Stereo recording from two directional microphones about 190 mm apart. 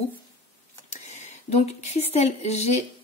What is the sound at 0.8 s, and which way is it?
Speech, 35° left (ahead or behind).